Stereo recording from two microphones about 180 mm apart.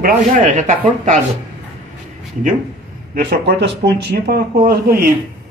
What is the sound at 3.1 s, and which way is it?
Speech, 65° right (ahead or behind).